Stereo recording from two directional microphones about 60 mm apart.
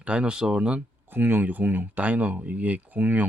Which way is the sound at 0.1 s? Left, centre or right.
Centre.